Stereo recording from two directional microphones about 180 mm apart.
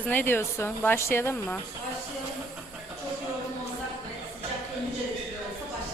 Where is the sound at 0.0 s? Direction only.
10° left (ahead or behind).